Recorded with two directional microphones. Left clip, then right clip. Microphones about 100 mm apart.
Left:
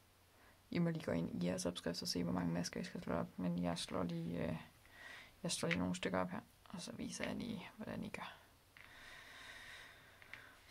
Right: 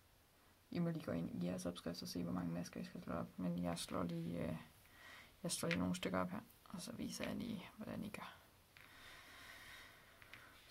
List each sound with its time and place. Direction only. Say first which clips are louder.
0.7 s speech: left 4 dB; 55° left (ahead or behind)
3.3 s speech: left 3 dB; 20° left (ahead or behind)
9.0 s boat: left 3 dB; 15° left (ahead or behind)
10.3 s a sound: left 5 dB; 20° left (ahead or behind)